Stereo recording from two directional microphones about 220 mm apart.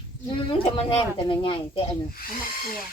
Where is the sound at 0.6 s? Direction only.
25° left (ahead or behind).